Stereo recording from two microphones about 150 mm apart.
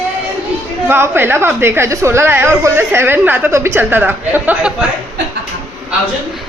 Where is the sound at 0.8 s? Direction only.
15° right (ahead or behind).